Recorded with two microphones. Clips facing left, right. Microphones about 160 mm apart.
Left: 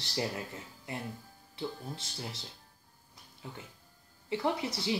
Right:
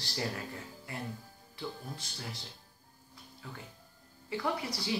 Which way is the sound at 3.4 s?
20° left (ahead or behind).